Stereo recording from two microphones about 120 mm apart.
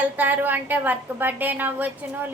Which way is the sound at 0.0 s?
15° right (ahead or behind).